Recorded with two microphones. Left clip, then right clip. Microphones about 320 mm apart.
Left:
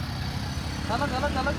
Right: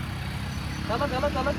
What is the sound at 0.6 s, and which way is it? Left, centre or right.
Speech, left.